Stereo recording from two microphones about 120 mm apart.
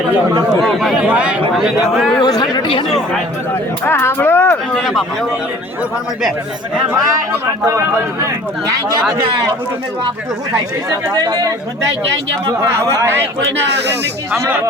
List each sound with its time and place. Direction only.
0.6 s a man's voice: centre (ahead or behind)
1.5 s a man's voice: centre (ahead or behind)
2.1 s speech: 35° left (ahead or behind)
3.8 s speech: 20° left (ahead or behind)
4.7 s a man's voice: centre (ahead or behind)
11.1 s speech: 30° right (ahead or behind)
12.8 s speech: 25° right (ahead or behind)